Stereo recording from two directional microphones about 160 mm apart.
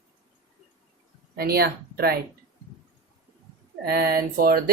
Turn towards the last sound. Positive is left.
turn(degrees=-65)  # may be behind; listen again after turning